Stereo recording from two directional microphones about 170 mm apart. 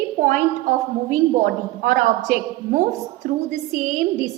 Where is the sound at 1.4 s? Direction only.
55° right (ahead or behind).